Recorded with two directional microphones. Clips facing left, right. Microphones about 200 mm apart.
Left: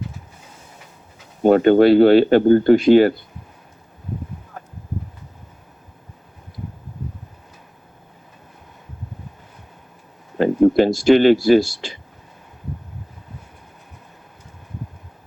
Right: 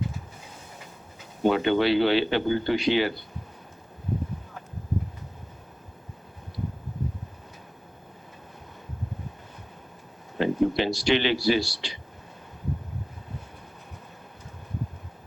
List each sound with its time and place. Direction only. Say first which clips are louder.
1.4 s speech: left 10 dB; 45° left (ahead or behind)
10.3 s speech: left 9 dB; 45° left (ahead or behind)